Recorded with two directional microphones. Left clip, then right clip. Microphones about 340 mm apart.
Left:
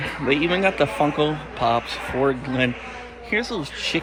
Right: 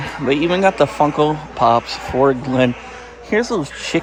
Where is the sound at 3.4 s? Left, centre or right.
Right.